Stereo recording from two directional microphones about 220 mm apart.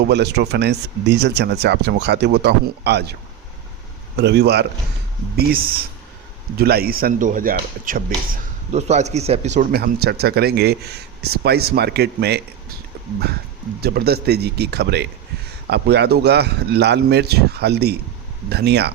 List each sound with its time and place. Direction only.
0.1 s speech: 50° right (ahead or behind)
4.2 s speech: 50° right (ahead or behind)
13.8 s speech: 45° right (ahead or behind)